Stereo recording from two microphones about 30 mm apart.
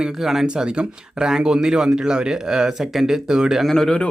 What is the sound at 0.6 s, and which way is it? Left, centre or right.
Speech, right.